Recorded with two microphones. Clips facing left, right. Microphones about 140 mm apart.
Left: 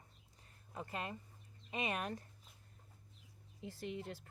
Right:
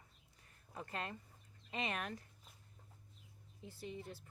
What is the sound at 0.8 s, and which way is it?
Speech, 15° left (ahead or behind).